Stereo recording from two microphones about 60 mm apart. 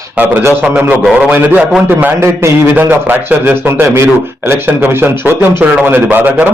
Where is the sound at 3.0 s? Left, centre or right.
Right.